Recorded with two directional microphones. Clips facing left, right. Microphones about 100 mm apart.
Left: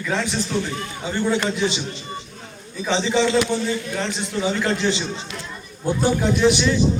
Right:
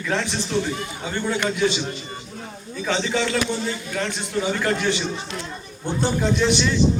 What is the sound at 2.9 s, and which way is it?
A man's voice, 15° left (ahead or behind).